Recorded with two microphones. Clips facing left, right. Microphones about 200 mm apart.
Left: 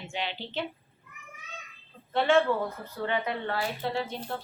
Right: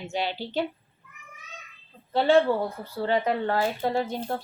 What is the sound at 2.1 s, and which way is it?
Speech, 35° right (ahead or behind).